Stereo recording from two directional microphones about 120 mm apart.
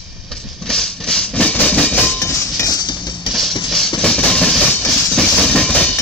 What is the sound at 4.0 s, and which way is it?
Train, 10° left (ahead or behind).